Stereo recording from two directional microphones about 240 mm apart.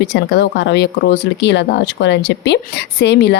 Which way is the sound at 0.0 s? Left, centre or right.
Left.